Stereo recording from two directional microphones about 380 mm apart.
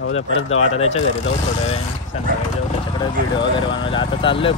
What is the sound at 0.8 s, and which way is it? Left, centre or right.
Speech, centre.